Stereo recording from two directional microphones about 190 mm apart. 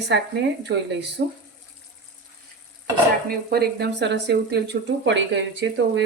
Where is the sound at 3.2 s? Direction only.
55° right (ahead or behind).